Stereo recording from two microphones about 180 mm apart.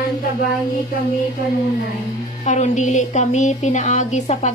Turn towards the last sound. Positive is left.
turn(degrees=40)  # may be behind; listen again after turning